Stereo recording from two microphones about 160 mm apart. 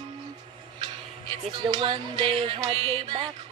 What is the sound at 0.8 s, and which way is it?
Speech, 30° right (ahead or behind).